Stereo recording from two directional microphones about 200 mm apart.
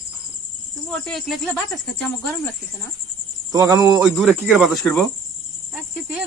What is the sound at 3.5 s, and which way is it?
Speech, 15° right (ahead or behind).